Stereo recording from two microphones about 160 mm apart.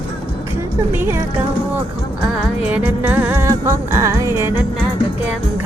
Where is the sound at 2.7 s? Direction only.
10° right (ahead or behind).